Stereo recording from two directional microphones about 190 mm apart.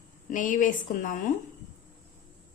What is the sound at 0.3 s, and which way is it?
Speech, 45° left (ahead or behind).